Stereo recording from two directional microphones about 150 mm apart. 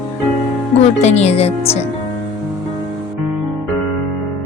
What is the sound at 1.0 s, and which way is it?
Speech, 45° left (ahead or behind).